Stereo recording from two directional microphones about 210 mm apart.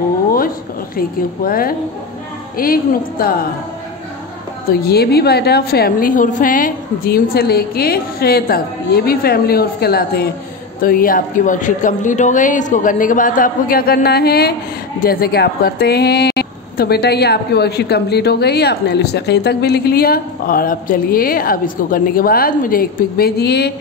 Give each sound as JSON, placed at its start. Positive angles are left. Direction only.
{"t": 0.9, "sound": "speech", "side_deg": 45}
{"t": 4.8, "sound": "a man's voice", "side_deg": 50}